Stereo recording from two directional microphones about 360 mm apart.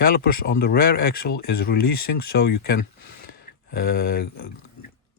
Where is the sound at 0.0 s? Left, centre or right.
Left.